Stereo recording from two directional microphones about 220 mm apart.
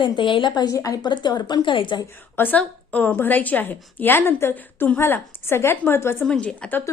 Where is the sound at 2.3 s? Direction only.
10° left (ahead or behind).